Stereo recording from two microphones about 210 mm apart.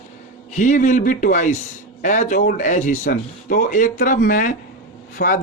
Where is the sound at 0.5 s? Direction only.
35° left (ahead or behind).